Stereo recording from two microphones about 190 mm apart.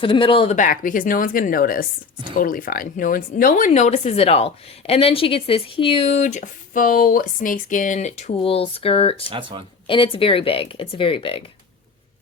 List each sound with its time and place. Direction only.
0.0 s speech: 25° left (ahead or behind)
0.5 s a woman's voice: 45° left (ahead or behind)
9.3 s speech: 25° right (ahead or behind)
9.8 s speech: 25° left (ahead or behind)